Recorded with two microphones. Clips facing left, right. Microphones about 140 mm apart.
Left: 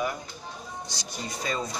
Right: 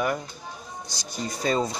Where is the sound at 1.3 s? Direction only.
35° right (ahead or behind).